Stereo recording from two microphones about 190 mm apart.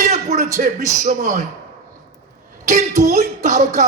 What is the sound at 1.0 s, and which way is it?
Speech, 40° right (ahead or behind).